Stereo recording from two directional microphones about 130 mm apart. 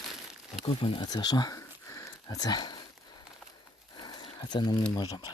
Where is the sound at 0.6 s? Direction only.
45° left (ahead or behind).